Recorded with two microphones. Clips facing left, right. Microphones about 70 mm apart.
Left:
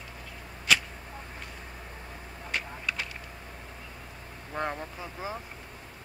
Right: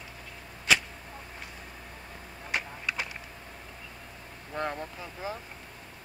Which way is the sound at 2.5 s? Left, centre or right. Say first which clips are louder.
Right 1 dB; centre.